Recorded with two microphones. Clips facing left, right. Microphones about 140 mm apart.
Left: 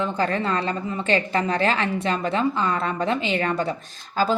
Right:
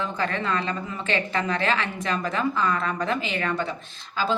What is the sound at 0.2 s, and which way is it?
A woman's voice, 35° left (ahead or behind).